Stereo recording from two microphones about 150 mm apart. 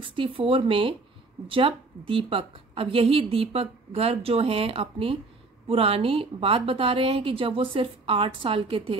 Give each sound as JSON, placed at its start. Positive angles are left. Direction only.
{"t": 0.1, "sound": "a woman's voice", "side_deg": -35}